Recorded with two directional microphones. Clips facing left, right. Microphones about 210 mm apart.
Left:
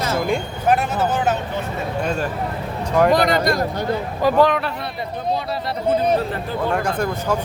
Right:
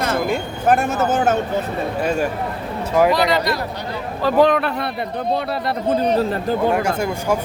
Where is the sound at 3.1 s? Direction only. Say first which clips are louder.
Left 1 dB; 50° left (ahead or behind).